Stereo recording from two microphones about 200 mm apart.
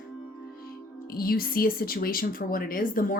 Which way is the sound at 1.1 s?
50° left (ahead or behind).